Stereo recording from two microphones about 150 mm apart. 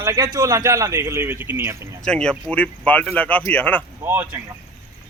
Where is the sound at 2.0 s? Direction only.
5° left (ahead or behind).